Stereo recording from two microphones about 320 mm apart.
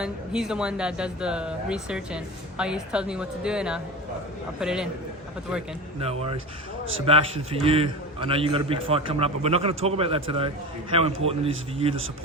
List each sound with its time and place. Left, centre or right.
0.0 s speech: centre
6.0 s a man's voice: centre